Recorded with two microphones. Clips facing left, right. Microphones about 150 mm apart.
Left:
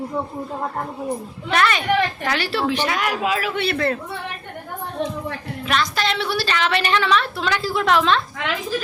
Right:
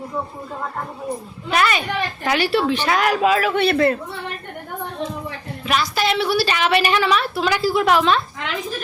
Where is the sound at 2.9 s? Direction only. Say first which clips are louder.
Right 5 dB; 40° right (ahead or behind).